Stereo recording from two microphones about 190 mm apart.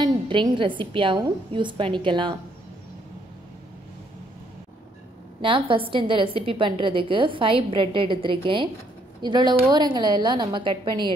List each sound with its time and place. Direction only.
0.0 s a woman's voice: 25° right (ahead or behind)
5.4 s a woman's voice: 25° right (ahead or behind)